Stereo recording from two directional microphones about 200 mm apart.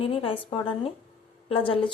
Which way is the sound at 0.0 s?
25° left (ahead or behind).